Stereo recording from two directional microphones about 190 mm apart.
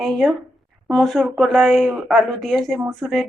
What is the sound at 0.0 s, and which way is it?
A woman's voice, centre (ahead or behind).